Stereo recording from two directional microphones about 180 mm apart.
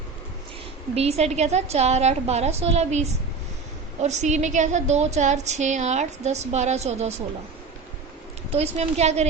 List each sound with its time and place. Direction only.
0.9 s a woman's voice: 35° right (ahead or behind)
8.5 s a woman's voice: 35° right (ahead or behind)